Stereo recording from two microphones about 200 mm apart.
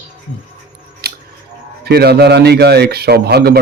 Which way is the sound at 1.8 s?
50° right (ahead or behind).